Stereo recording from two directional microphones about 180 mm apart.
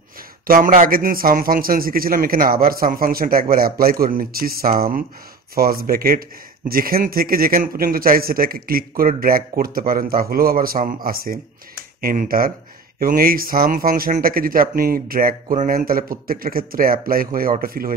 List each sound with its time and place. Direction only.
0.5 s speech: 50° right (ahead or behind)